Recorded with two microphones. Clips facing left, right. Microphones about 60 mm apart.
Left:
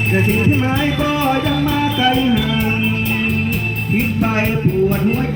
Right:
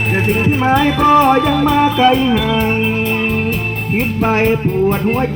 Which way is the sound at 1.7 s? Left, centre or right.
Right.